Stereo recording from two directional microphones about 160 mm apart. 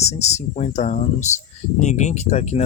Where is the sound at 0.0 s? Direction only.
45° left (ahead or behind).